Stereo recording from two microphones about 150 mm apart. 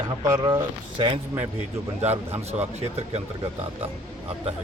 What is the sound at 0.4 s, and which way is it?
Speech, 30° right (ahead or behind).